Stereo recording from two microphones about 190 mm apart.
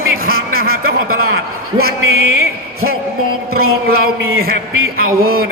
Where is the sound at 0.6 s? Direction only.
55° right (ahead or behind).